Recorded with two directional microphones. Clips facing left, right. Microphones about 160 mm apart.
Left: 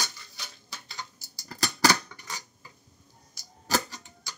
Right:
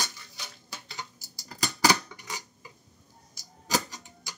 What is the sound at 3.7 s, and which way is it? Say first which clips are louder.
Tick-tock: left 1 dB; 15° right (ahead or behind).